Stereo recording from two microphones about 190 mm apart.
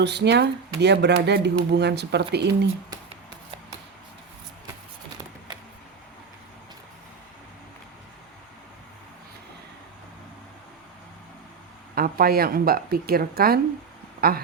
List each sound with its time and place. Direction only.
0.0 s speech: 65° right (ahead or behind)
11.9 s a woman's voice: 50° right (ahead or behind)